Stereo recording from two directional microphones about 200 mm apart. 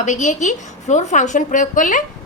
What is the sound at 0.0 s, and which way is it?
A woman's voice, 35° left (ahead or behind).